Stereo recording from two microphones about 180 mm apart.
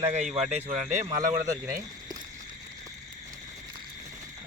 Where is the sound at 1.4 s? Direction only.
20° right (ahead or behind).